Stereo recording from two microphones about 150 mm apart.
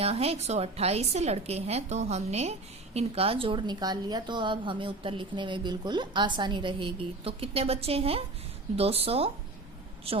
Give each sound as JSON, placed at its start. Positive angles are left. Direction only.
{"t": 0.0, "sound": "a woman's voice", "side_deg": -45}